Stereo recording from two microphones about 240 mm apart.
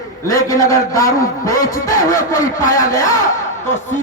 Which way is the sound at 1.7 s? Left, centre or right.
Left.